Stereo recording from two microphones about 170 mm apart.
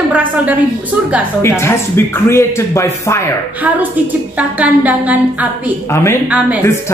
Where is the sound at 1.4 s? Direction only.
15° left (ahead or behind).